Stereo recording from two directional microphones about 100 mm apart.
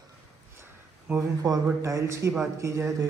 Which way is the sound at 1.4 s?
35° right (ahead or behind).